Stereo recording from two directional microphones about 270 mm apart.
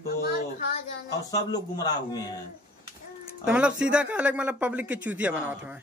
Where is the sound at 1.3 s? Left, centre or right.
Centre.